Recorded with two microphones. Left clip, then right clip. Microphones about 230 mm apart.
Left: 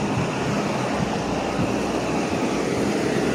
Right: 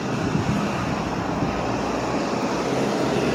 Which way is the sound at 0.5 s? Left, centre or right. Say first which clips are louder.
Left 1 dB; left.